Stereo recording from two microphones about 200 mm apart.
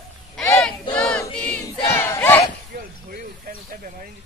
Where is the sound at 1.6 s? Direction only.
15° left (ahead or behind).